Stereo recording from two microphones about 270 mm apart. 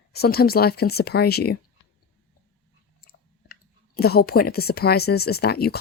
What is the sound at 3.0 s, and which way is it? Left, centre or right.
Speech, left.